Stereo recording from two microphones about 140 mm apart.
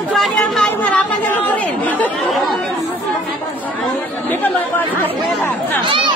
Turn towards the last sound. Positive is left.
turn(degrees=-35)  # may be behind; listen again after turning